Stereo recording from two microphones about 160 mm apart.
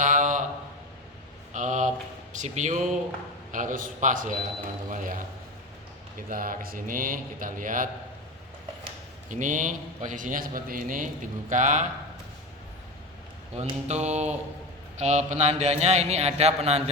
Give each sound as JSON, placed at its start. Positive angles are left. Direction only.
{"t": 0.0, "sound": "a sound", "side_deg": -55}
{"t": 1.5, "sound": "a sound", "side_deg": -50}
{"t": 2.3, "sound": "a man's voice", "side_deg": -50}
{"t": 6.3, "sound": "speech", "side_deg": -60}
{"t": 9.3, "sound": "a man's voice", "side_deg": -50}
{"t": 13.6, "sound": "a man's voice", "side_deg": -45}